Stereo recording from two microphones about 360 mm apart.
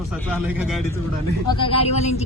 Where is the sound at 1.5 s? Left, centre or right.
Centre.